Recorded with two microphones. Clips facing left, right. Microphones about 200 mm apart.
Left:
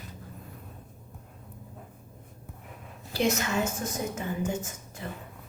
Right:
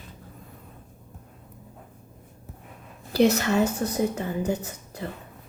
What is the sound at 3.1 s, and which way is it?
A woman's voice, 35° right (ahead or behind).